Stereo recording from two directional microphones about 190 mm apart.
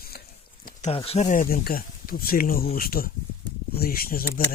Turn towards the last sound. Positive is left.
turn(degrees=50)  # may be behind; listen again after turning